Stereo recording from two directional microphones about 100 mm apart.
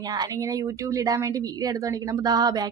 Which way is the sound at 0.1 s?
40° right (ahead or behind).